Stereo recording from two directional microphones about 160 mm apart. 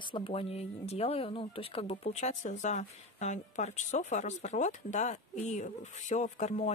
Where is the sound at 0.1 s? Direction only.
35° left (ahead or behind).